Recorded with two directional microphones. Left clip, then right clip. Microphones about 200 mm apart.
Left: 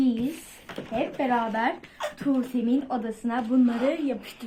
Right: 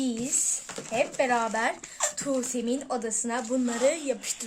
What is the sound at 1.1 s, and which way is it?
Speech, 45° right (ahead or behind).